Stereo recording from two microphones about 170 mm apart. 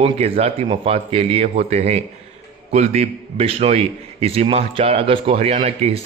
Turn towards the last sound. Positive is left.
turn(degrees=-35)  # may be behind; listen again after turning